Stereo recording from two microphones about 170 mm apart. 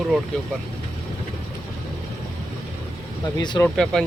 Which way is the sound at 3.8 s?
5° left (ahead or behind).